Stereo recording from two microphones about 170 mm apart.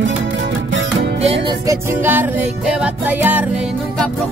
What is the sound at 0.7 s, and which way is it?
Music, 90° right.